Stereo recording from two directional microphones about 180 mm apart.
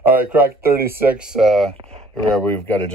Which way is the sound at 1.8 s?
35° right (ahead or behind).